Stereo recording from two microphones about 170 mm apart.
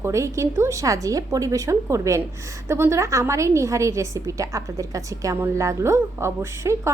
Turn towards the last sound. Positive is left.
turn(degrees=-15)  # may be behind; listen again after turning